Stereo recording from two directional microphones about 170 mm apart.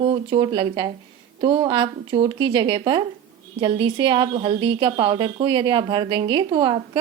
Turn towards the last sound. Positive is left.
turn(degrees=-25)  # may be behind; listen again after turning